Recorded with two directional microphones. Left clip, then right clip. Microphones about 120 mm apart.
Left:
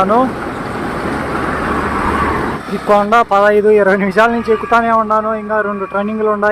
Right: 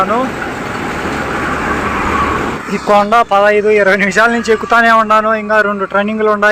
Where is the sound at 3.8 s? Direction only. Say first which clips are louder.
Right 2 dB; 15° left (ahead or behind).